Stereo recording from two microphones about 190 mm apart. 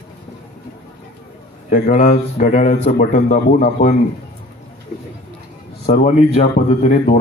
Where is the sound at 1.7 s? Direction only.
45° left (ahead or behind).